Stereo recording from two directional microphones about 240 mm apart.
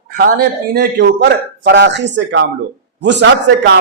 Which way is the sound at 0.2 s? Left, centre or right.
Right.